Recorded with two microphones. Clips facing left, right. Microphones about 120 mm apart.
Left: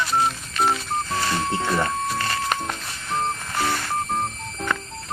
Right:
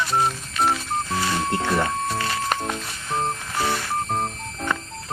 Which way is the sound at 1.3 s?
Centre (ahead or behind).